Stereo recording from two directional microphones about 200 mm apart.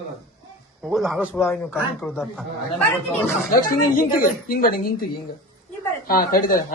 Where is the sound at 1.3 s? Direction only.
10° left (ahead or behind).